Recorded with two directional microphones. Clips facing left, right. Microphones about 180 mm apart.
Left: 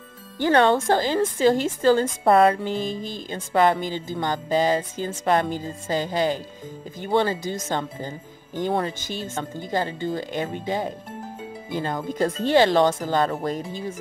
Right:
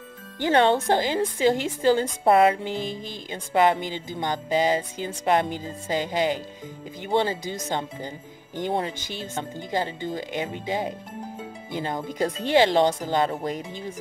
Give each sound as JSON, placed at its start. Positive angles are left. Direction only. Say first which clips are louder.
{"t": 0.4, "sound": "speech", "louder": "left 2 dB", "side_deg": -15}